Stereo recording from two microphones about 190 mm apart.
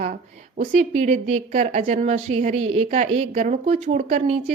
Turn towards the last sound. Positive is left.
turn(degrees=-40)  # may be behind; listen again after turning